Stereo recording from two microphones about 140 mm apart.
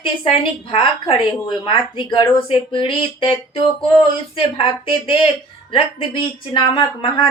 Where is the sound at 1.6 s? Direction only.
35° left (ahead or behind).